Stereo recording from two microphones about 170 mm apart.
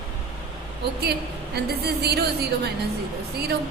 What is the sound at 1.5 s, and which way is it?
Speech, 70° right (ahead or behind).